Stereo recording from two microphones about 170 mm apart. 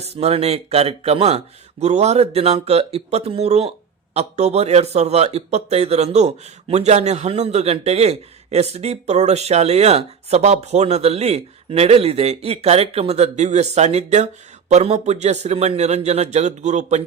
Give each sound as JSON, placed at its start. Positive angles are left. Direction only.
{"t": 0.0, "sound": "a man's voice", "side_deg": -40}